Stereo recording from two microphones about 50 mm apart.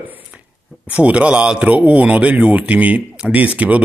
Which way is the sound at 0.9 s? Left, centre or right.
Right.